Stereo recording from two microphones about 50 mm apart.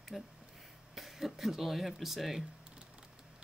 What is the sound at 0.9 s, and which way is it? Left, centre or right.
Speech, centre.